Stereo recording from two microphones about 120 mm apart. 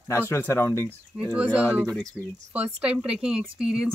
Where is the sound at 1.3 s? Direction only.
10° right (ahead or behind).